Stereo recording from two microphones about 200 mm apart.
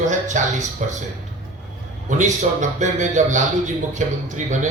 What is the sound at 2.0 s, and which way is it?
A man's voice, 40° right (ahead or behind).